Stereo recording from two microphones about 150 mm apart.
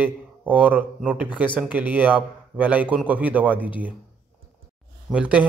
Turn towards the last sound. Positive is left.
turn(degrees=-10)  # may be behind; listen again after turning